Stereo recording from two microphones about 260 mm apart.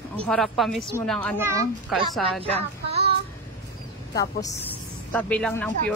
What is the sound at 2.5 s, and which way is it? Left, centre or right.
Child singing, right.